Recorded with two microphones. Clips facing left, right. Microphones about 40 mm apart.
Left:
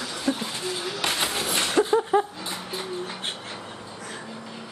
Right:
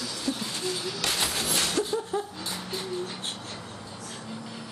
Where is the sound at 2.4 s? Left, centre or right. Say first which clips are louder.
Left 2 dB; centre.